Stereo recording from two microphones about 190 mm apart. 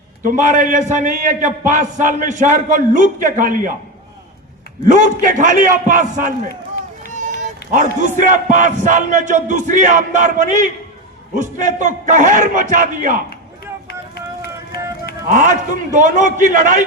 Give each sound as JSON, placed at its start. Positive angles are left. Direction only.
{"t": 0.2, "sound": "a man's voice", "side_deg": -45}
{"t": 4.9, "sound": "a man's voice", "side_deg": -40}
{"t": 15.3, "sound": "a man's voice", "side_deg": -40}